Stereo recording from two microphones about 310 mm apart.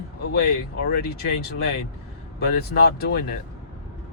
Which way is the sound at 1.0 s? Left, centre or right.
Left.